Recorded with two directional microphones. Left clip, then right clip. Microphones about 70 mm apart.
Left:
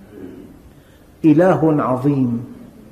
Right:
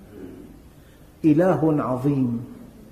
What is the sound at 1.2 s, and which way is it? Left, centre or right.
A man's voice, left.